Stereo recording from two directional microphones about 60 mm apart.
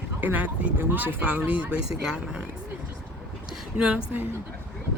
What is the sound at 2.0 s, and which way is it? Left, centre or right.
Speech, centre.